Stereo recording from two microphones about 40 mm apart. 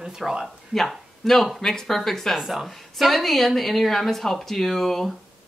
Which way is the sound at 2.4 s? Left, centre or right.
Centre.